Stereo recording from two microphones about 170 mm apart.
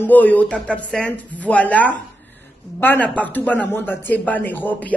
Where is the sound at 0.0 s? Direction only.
10° left (ahead or behind).